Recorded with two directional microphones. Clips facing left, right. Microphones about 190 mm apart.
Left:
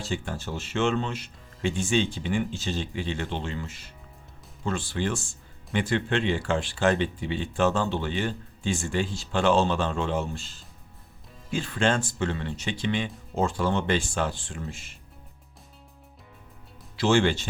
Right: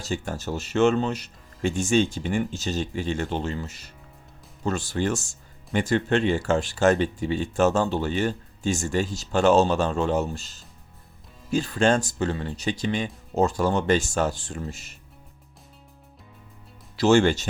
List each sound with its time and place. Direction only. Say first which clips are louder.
0.0 s speech: right 2 dB; 40° right (ahead or behind)
17.0 s speech: right 4 dB; 40° right (ahead or behind)